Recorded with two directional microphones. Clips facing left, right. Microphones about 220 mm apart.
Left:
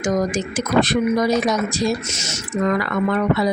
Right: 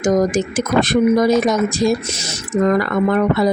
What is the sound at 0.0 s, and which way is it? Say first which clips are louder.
Speech: right 5 dB; 45° right (ahead or behind).